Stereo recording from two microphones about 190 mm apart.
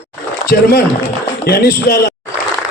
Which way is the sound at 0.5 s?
55° left (ahead or behind).